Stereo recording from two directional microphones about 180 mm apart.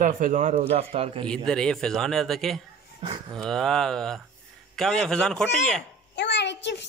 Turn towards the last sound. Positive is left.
turn(degrees=75)  # may be behind; listen again after turning